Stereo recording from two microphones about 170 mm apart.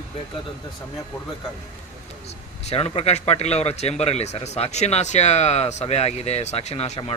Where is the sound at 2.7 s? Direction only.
40° left (ahead or behind).